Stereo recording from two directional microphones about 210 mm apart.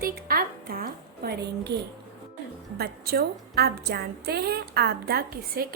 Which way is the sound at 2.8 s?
45° right (ahead or behind).